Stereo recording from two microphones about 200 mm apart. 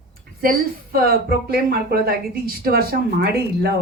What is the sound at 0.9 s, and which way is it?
A woman's voice, 50° right (ahead or behind).